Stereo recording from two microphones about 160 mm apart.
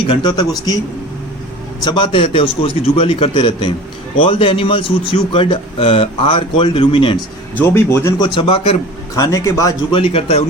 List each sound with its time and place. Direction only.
0.1 s a man's voice: 30° left (ahead or behind)
1.8 s speech: 30° left (ahead or behind)
7.6 s speech: 15° left (ahead or behind)
8.2 s speech: 35° left (ahead or behind)
9.1 s a man's voice: 20° left (ahead or behind)
9.9 s speech: 35° left (ahead or behind)